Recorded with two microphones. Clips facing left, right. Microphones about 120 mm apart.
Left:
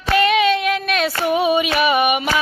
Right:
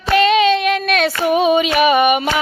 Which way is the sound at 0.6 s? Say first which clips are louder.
Right 3 dB; 70° right (ahead or behind).